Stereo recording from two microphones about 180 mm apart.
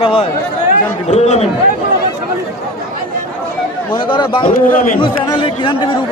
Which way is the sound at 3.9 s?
25° left (ahead or behind).